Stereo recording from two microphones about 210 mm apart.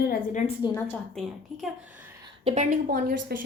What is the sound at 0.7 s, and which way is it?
Speech, centre (ahead or behind).